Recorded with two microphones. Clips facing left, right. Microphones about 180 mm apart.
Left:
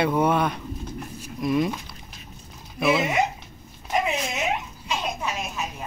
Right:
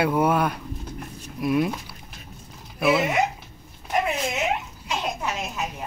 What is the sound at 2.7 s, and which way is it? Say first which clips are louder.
Speech: right 1 dB; centre (ahead or behind).